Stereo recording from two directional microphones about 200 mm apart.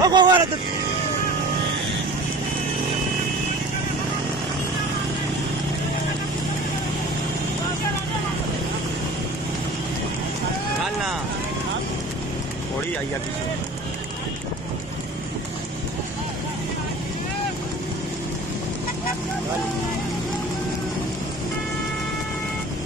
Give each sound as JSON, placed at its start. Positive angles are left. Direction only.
{"t": 0.0, "sound": "vehicle", "side_deg": -20}